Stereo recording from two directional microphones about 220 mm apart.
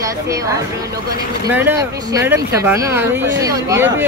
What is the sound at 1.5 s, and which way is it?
Speech, 15° right (ahead or behind).